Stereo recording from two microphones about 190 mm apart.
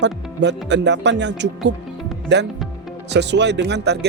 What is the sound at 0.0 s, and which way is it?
Speech, 65° right (ahead or behind).